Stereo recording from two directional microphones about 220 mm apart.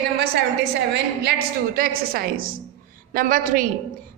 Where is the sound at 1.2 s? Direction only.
45° right (ahead or behind).